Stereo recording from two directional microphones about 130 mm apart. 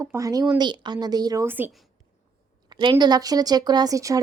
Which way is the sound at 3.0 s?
30° right (ahead or behind).